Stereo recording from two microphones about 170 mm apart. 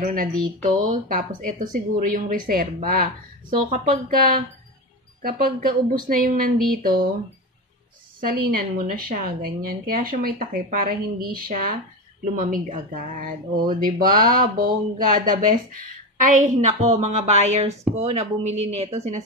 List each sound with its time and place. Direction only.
0.0 s a woman's voice: 50° right (ahead or behind)
8.2 s a woman's voice: 55° right (ahead or behind); by 19.2 s 40° right (ahead or behind)